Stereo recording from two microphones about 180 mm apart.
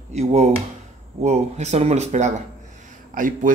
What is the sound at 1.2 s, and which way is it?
Speech, 40° right (ahead or behind).